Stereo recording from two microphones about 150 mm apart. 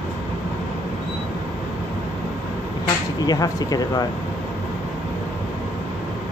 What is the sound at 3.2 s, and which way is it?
Speech, 25° left (ahead or behind).